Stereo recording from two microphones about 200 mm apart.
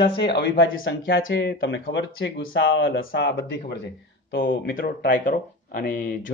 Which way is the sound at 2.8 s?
55° left (ahead or behind).